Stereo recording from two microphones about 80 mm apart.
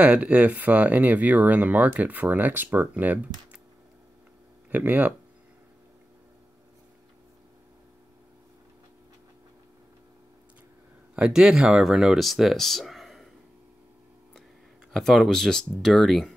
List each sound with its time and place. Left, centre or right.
0.0 s speech: centre
4.6 s speech: right
11.1 s speech: centre
14.9 s speech: centre